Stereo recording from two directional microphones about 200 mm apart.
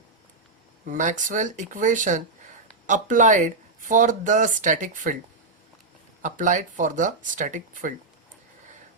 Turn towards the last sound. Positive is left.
turn(degrees=-40)  # may be behind; listen again after turning